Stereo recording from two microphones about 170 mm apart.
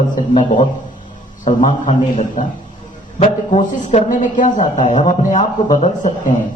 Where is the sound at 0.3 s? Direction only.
45° left (ahead or behind).